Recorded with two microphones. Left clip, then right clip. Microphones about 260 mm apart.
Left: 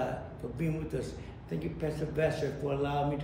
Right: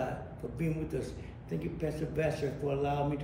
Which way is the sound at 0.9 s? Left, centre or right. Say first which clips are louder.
Left 1 dB; centre.